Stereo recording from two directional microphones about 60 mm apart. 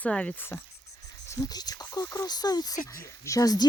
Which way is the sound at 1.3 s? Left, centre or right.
Left.